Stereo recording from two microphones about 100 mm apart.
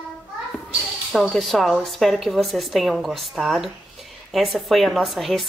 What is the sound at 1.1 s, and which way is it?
A woman's voice, centre (ahead or behind).